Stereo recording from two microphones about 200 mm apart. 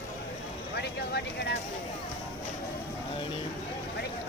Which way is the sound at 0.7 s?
55° left (ahead or behind).